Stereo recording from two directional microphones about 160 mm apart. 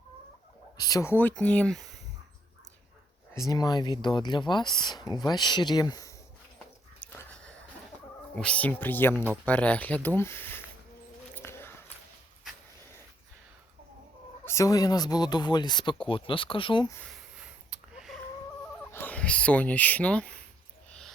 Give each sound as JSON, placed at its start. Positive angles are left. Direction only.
{"t": 0.8, "sound": "speech", "side_deg": 20}
{"t": 1.1, "sound": "speech", "side_deg": 10}
{"t": 3.3, "sound": "speech", "side_deg": 20}
{"t": 7.0, "sound": "a sound", "side_deg": 10}
{"t": 8.4, "sound": "speech", "side_deg": 10}
{"t": 11.3, "sound": "a sound", "side_deg": 15}
{"t": 14.4, "sound": "speech", "side_deg": 20}
{"t": 17.3, "sound": "a sound", "side_deg": -5}
{"t": 18.9, "sound": "speech", "side_deg": 10}